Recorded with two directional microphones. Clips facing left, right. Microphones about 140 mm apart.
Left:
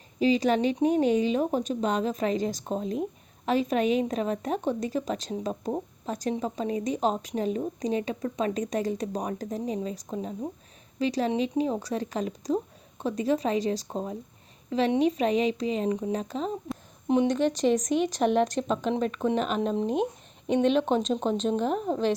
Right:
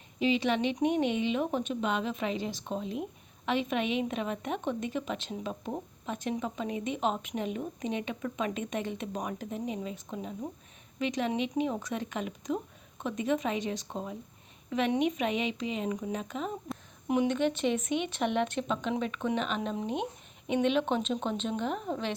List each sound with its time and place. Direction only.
0.2 s speech: 40° left (ahead or behind)